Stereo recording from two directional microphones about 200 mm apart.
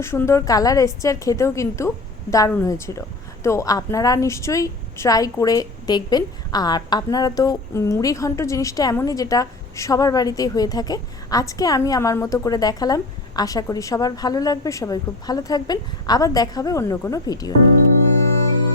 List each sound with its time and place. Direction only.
0.0 s a woman's voice: 15° left (ahead or behind)